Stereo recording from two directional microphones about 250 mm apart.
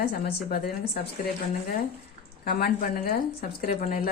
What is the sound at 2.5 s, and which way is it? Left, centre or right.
A woman's voice, left.